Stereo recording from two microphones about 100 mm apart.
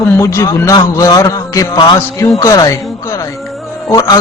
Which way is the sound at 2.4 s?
30° left (ahead or behind).